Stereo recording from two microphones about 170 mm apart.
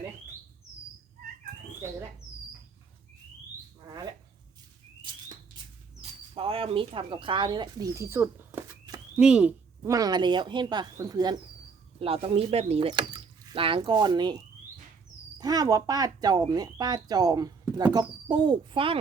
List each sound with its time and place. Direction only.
3.8 s a sound: 25° right (ahead or behind)
6.0 s bird: 35° right (ahead or behind); by 9.9 s 10° right (ahead or behind)
9.9 s speech: 25° right (ahead or behind)
11.9 s speech: 35° right (ahead or behind)